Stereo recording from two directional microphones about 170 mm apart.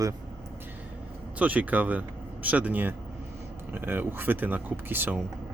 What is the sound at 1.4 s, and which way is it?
Speech, 10° right (ahead or behind).